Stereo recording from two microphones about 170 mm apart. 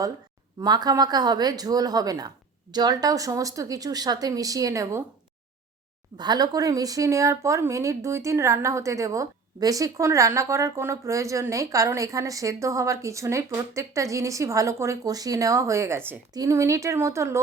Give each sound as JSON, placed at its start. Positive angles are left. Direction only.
{"t": 0.6, "sound": "speech", "side_deg": -25}
{"t": 6.1, "sound": "a woman's voice", "side_deg": -25}